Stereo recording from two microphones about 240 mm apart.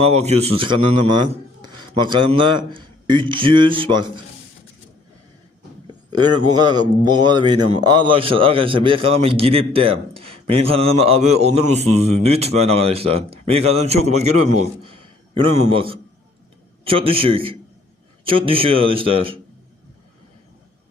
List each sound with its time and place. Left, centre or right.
0.0 s a man's voice: right
5.9 s a man's voice: centre